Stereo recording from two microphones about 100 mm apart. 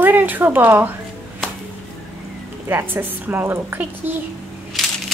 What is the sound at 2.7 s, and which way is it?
Speech, 20° right (ahead or behind).